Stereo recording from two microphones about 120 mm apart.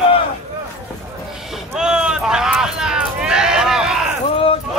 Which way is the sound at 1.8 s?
5° right (ahead or behind).